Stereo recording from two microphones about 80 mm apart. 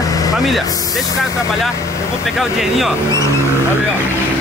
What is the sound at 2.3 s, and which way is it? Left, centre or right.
Speech, centre.